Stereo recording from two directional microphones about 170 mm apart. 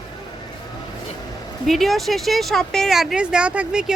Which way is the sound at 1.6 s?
Centre (ahead or behind).